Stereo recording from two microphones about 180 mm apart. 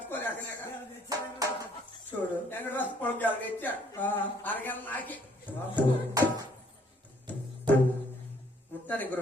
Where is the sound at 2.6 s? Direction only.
10° left (ahead or behind).